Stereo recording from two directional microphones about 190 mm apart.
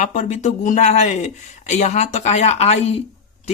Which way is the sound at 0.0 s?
40° left (ahead or behind).